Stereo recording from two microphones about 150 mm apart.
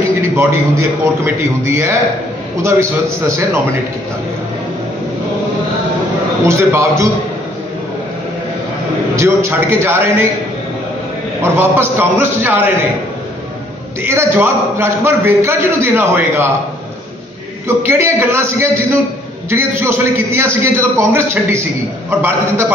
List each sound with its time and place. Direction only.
0.4 s a man's voice: 15° right (ahead or behind)
6.4 s a man's voice: 20° right (ahead or behind)
9.1 s a man's voice: 20° right (ahead or behind)
11.4 s a man's voice: 15° right (ahead or behind)
14.0 s a man's voice: 15° right (ahead or behind)
17.6 s a man's voice: 15° right (ahead or behind)